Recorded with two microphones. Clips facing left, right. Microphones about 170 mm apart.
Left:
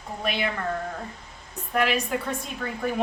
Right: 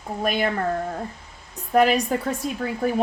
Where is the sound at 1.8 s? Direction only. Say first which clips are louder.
Right 6 dB; 40° right (ahead or behind).